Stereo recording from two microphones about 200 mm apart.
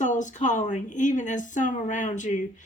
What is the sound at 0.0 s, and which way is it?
A woman's voice, 40° left (ahead or behind).